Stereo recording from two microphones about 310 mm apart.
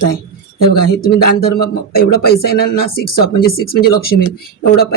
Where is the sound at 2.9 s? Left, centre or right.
Left.